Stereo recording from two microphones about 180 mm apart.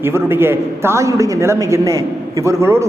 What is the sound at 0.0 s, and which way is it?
A man's voice, 15° right (ahead or behind).